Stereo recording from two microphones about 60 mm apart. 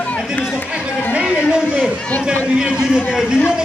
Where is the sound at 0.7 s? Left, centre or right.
Centre.